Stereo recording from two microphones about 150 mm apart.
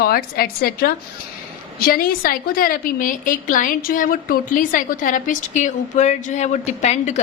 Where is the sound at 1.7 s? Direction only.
75° left (ahead or behind).